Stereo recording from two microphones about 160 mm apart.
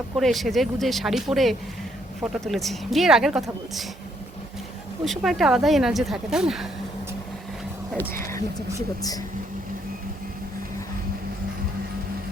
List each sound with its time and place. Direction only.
0.2 s speech: centre (ahead or behind)
5.0 s speech: centre (ahead or behind)
7.9 s speech: 15° left (ahead or behind)